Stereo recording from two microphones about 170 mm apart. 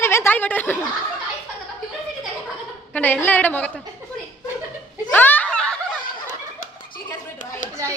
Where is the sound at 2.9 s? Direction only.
10° left (ahead or behind).